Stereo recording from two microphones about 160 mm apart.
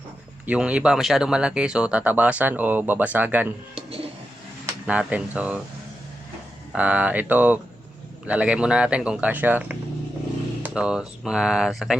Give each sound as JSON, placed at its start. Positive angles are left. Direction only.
{"t": 0.4, "sound": "speech", "side_deg": -5}
{"t": 3.8, "sound": "a sound", "side_deg": -35}
{"t": 4.9, "sound": "speech", "side_deg": -5}
{"t": 6.7, "sound": "speech", "side_deg": -10}